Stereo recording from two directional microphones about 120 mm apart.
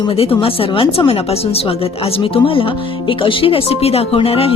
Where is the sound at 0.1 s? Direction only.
55° left (ahead or behind).